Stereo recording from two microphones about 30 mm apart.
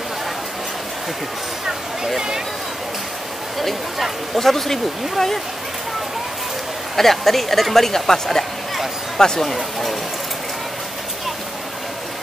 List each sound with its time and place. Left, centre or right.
2.1 s speech: right
3.5 s speech: centre
7.0 s speech: centre